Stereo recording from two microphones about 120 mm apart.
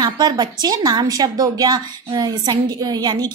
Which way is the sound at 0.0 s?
35° right (ahead or behind).